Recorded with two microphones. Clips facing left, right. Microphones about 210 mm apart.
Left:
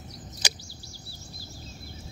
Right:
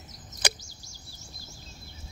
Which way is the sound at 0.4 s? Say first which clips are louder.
Right 6 dB; 55° right (ahead or behind).